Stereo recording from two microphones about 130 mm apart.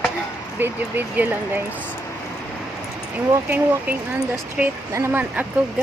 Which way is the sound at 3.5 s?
15° right (ahead or behind).